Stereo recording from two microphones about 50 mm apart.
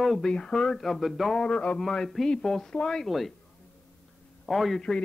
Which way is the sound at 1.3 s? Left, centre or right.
Left.